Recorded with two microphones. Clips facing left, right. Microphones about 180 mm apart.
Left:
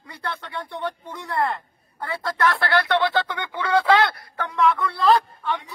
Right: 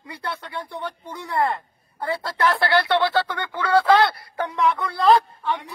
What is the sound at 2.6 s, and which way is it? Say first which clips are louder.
Speech: right 1 dB; 5° right (ahead or behind).